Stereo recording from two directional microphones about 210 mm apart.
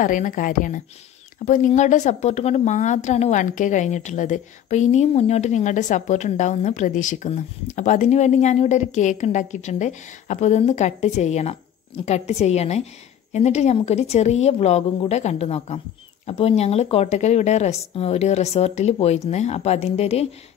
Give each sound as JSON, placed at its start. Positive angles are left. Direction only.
{"t": 0.0, "sound": "a woman's voice", "side_deg": 40}